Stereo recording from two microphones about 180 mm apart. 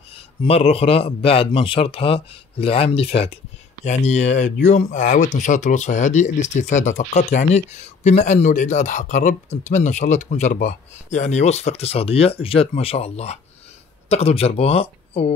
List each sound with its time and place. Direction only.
0.5 s speech: 35° left (ahead or behind)